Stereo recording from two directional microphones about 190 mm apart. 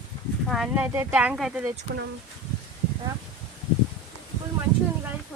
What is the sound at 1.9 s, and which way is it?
Speech, 55° right (ahead or behind).